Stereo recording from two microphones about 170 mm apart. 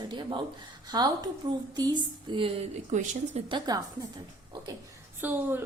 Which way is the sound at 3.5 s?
25° right (ahead or behind).